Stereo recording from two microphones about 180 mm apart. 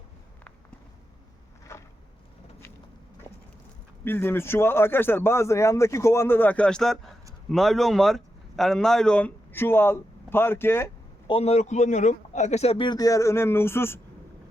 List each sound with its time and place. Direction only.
1.7 s a sound: 15° left (ahead or behind)
4.0 s a man's voice: 10° left (ahead or behind)
11.3 s a man's voice: 35° left (ahead or behind); by 14.0 s 15° left (ahead or behind)